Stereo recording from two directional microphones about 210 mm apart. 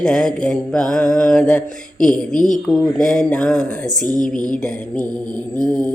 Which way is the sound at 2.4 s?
35° left (ahead or behind).